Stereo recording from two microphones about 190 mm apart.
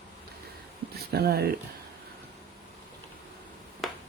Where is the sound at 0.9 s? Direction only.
55° right (ahead or behind).